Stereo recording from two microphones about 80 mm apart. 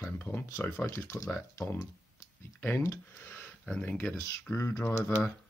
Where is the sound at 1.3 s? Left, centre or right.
Left; by 4.1 s centre.